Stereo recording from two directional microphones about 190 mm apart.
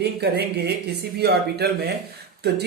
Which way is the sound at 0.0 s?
60° right (ahead or behind).